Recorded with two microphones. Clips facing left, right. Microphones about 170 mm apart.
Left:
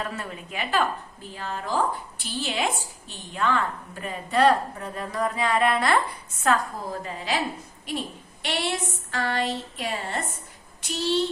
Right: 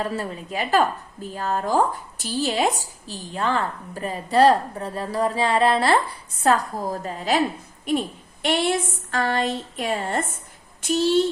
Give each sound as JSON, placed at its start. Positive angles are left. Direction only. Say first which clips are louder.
{"t": 0.0, "sound": "a woman's voice", "louder": "right 6 dB", "side_deg": -35}